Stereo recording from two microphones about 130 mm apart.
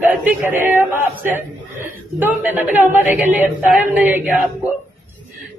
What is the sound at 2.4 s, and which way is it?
Speech, 15° right (ahead or behind).